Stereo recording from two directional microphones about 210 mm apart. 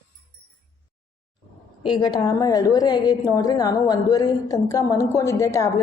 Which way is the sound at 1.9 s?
20° left (ahead or behind).